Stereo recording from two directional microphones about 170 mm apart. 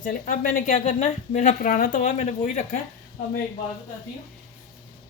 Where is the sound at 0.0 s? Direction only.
50° left (ahead or behind).